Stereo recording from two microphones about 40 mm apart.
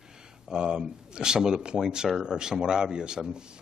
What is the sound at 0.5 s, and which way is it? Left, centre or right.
Speech, right.